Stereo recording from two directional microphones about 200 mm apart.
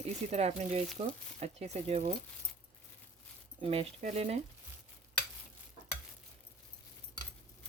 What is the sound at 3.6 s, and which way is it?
Speech, 30° right (ahead or behind).